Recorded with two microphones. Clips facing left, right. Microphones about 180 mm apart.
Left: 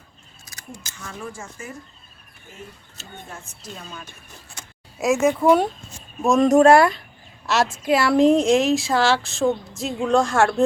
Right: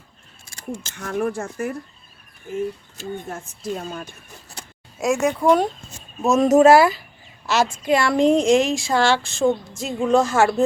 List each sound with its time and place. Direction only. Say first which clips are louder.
0.4 s scissors: right 9 dB; 25° right (ahead or behind)
0.9 s speech: right 11 dB; 60° right (ahead or behind)
3.2 s speech: right 10 dB; 50° right (ahead or behind)
4.9 s speech: left 1 dB; centre (ahead or behind)